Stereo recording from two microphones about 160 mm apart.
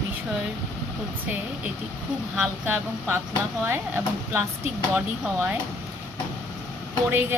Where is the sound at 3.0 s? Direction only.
15° right (ahead or behind).